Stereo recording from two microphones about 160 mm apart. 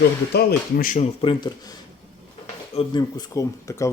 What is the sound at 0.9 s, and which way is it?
Speech, 35° left (ahead or behind).